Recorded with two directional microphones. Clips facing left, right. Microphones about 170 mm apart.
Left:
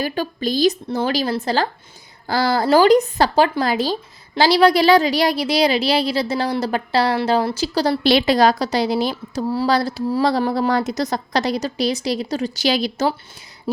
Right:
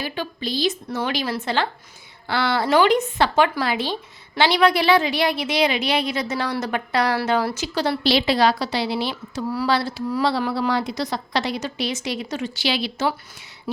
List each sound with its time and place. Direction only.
0.0 s a woman's voice: 45° left (ahead or behind)
8.0 s a woman's voice: 50° left (ahead or behind)
9.4 s a sound: 30° left (ahead or behind)
9.7 s a woman's voice: 40° left (ahead or behind)